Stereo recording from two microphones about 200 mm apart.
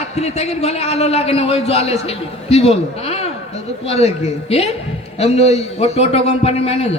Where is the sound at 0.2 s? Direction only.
30° left (ahead or behind).